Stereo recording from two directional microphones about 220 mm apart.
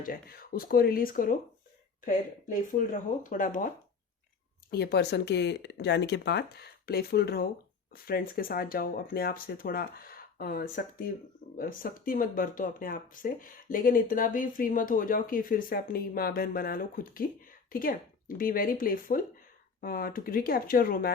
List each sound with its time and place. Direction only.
0.0 s speech: 40° left (ahead or behind)
4.7 s speech: 45° left (ahead or behind)